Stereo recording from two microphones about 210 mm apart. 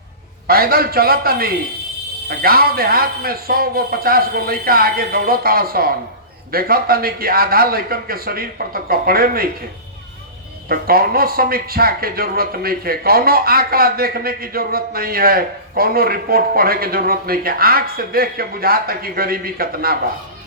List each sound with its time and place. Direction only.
0.4 s a man's voice: 45° right (ahead or behind)
10.7 s a man's voice: 45° right (ahead or behind)